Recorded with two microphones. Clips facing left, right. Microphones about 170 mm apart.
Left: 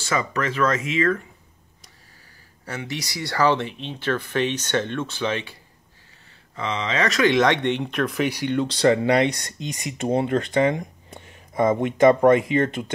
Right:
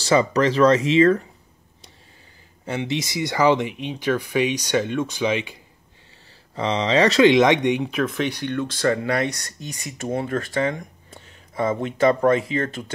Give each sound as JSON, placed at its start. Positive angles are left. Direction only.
{"t": 0.0, "sound": "speech", "side_deg": -35}
{"t": 2.6, "sound": "speech", "side_deg": -25}
{"t": 6.5, "sound": "speech", "side_deg": -35}
{"t": 7.8, "sound": "speech", "side_deg": -5}